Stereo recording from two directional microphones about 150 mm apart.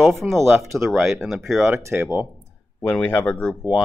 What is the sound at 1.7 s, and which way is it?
Speech, 15° right (ahead or behind).